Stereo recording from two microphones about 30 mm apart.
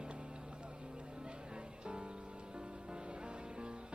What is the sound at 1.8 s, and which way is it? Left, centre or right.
Music, right.